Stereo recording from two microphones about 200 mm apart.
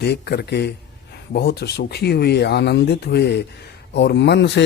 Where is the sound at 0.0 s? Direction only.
55° left (ahead or behind).